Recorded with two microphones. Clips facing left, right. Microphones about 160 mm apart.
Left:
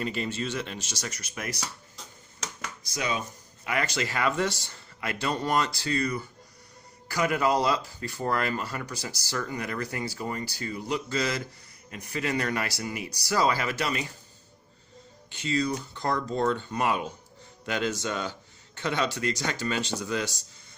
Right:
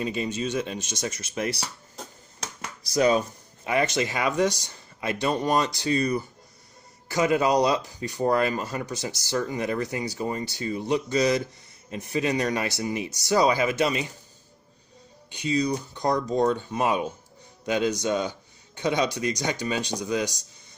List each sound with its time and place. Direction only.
0.0 s speech: 15° right (ahead or behind); by 1.7 s 30° right (ahead or behind)
2.0 s a sound: 50° right (ahead or behind)
2.4 s music: 35° right (ahead or behind)
3.7 s speech: 20° right (ahead or behind)
15.3 s a man's voice: 15° right (ahead or behind)